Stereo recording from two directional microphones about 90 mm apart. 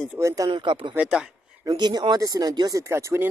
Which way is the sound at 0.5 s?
65° right (ahead or behind).